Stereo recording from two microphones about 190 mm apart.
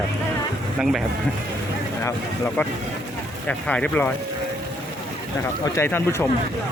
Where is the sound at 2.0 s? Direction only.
15° left (ahead or behind).